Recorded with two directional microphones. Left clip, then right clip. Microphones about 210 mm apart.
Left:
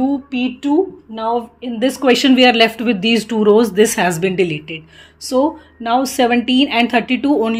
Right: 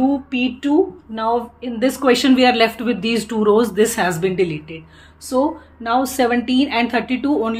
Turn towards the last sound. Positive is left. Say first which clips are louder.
# left 3 dB
turn(degrees=40)  # may be behind; listen again after turning